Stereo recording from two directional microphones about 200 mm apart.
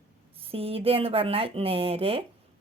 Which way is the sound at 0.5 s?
30° right (ahead or behind).